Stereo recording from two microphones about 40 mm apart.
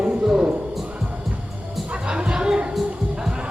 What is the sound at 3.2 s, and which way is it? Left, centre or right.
Music, centre.